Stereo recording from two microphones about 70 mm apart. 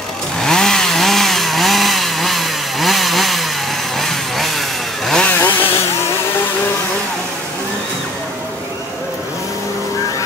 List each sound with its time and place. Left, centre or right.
0.4 s chainsaw: centre
4.0 s vehicle: centre
5.2 s chainsaw: left